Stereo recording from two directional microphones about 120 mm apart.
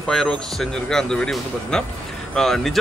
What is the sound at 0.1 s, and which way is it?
Speech, 5° left (ahead or behind).